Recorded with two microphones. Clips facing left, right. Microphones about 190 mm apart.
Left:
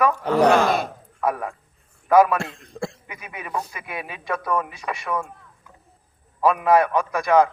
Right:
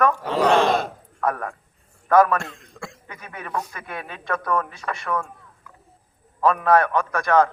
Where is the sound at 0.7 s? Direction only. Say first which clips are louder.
Right 1 dB; 10° left (ahead or behind).